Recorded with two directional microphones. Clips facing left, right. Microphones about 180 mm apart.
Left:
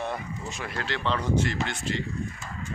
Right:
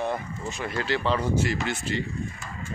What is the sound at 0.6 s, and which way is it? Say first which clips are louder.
Speech: right 4 dB; centre (ahead or behind).